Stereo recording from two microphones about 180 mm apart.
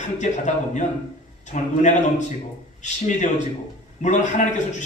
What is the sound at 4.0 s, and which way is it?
Speech, 40° left (ahead or behind).